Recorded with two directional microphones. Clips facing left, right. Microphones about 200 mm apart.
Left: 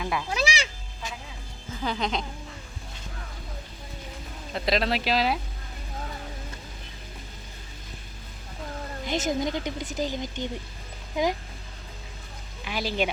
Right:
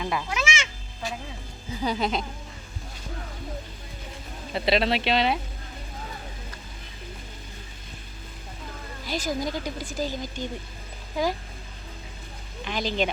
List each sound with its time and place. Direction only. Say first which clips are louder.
0.0 s speech: right 1 dB; centre (ahead or behind)
0.3 s cat: left 1 dB; 35° left (ahead or behind)
1.7 s speech: right 2 dB; 10° right (ahead or behind)
4.5 s speech: right 2 dB; centre (ahead or behind)
9.0 s speech: left 2 dB; 20° left (ahead or behind)
12.6 s speech: right 1 dB; 10° left (ahead or behind)